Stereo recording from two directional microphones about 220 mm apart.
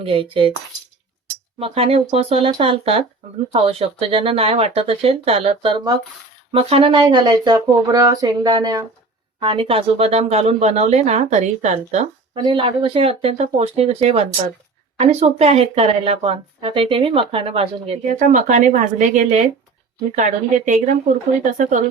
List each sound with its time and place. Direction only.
0.0 s speech: 25° right (ahead or behind)
1.5 s speech: 25° right (ahead or behind)